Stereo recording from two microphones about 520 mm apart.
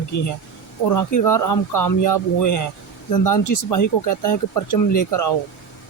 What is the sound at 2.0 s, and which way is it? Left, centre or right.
Speech, left.